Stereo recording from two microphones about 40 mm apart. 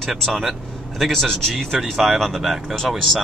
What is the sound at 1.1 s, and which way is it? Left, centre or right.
Speech, centre.